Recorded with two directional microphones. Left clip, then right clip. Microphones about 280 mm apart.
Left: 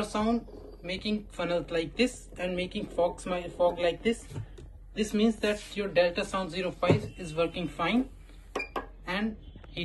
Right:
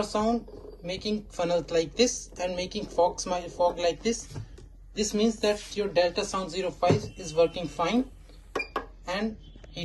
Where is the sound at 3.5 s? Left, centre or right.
Centre.